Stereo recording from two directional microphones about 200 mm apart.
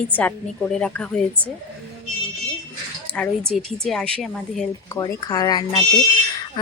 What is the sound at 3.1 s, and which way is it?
A woman's voice, 5° left (ahead or behind).